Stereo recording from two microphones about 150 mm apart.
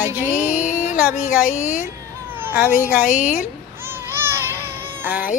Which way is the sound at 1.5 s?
55° left (ahead or behind).